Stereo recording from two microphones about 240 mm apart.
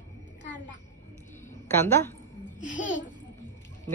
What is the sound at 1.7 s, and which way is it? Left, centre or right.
Speech, centre.